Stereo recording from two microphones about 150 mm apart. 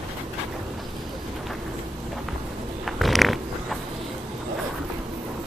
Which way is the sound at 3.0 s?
Centre (ahead or behind).